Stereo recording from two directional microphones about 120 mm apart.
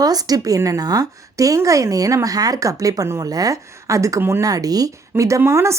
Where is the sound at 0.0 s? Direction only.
30° right (ahead or behind).